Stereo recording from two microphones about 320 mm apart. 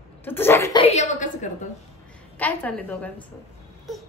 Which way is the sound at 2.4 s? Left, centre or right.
Centre.